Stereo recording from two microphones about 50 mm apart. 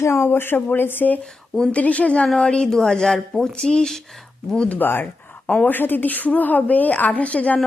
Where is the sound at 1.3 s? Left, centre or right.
Centre.